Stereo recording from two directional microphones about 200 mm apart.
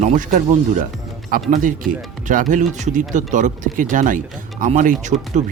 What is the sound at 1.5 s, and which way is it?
Speech, 40° right (ahead or behind).